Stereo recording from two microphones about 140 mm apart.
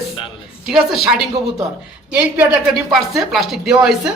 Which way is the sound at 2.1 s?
10° right (ahead or behind).